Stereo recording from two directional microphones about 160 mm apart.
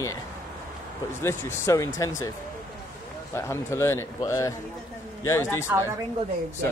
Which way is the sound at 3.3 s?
15° left (ahead or behind).